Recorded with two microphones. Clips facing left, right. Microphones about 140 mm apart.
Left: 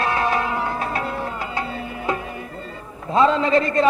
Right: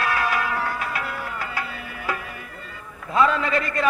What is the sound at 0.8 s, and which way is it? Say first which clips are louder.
Music: left 4 dB; 30° left (ahead or behind).